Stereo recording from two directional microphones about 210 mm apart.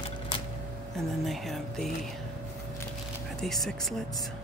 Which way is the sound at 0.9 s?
Centre (ahead or behind).